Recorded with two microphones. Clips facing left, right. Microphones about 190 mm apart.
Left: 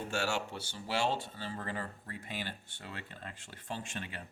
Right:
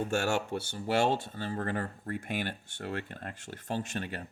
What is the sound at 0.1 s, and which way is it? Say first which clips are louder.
Speech: right 5 dB; 50° right (ahead or behind).